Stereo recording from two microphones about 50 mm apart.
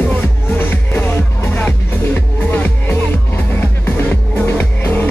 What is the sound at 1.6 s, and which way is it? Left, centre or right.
Music, left.